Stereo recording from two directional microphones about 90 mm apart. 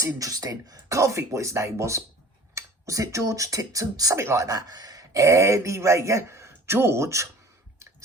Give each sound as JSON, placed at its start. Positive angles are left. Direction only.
{"t": 0.0, "sound": "speech", "side_deg": -40}